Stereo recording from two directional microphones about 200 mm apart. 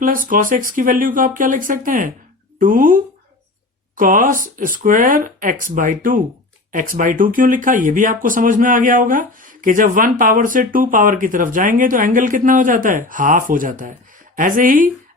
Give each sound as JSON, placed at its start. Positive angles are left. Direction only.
{"t": 0.3, "sound": "speech", "side_deg": -40}